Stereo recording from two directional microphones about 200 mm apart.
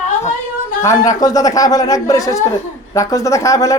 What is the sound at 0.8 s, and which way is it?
A man's voice, 15° left (ahead or behind).